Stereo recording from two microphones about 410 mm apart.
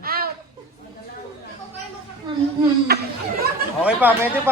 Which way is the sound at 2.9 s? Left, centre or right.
Right.